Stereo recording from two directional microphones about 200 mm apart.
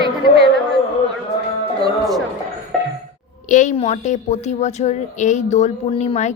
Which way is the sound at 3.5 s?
40° left (ahead or behind).